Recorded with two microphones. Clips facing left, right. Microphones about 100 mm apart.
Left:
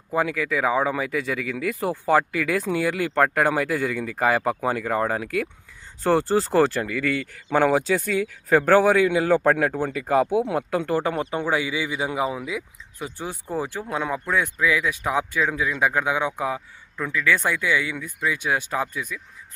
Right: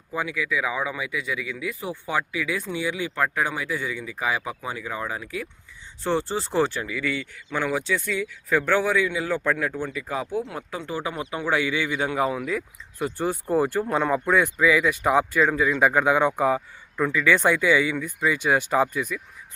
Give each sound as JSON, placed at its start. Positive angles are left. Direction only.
{"t": 0.1, "sound": "speech", "side_deg": 45}
{"t": 1.7, "sound": "speech", "side_deg": 0}
{"t": 2.0, "sound": "speech", "side_deg": 50}
{"t": 2.7, "sound": "speech", "side_deg": 60}
{"t": 6.0, "sound": "speech", "side_deg": 45}
{"t": 6.8, "sound": "speech", "side_deg": 65}
{"t": 8.3, "sound": "speech", "side_deg": 55}
{"t": 11.1, "sound": "a man's voice", "side_deg": 40}
{"t": 11.3, "sound": "speech", "side_deg": 20}